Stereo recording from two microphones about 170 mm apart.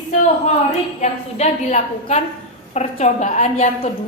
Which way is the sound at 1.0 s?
40° left (ahead or behind).